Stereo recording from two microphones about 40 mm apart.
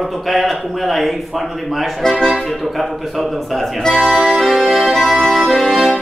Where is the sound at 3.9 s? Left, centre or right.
Centre.